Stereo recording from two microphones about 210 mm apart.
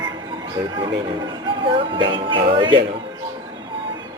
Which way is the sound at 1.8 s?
25° right (ahead or behind).